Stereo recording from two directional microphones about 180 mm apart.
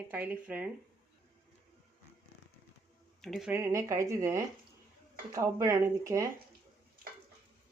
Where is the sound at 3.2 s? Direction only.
Centre (ahead or behind).